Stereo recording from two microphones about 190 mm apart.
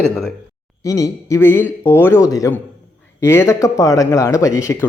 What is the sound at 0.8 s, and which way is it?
Speech, 15° left (ahead or behind).